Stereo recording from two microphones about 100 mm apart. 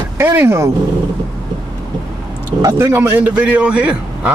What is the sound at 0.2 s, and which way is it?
Speech, 25° right (ahead or behind).